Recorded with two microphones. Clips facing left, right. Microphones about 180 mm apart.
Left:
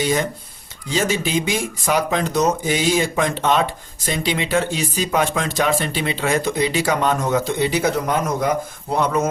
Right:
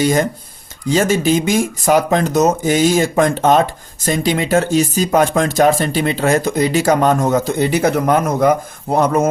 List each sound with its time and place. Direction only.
0.9 s speech: 45° right (ahead or behind)